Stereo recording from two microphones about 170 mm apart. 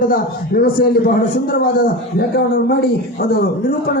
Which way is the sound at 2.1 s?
70° left (ahead or behind).